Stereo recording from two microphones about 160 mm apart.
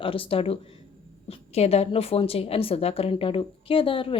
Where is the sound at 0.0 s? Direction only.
35° left (ahead or behind).